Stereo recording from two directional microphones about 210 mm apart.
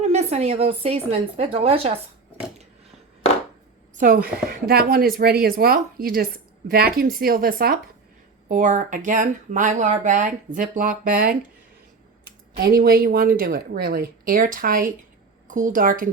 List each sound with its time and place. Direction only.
0.1 s speech: 30° right (ahead or behind)
3.9 s a woman's voice: 40° right (ahead or behind)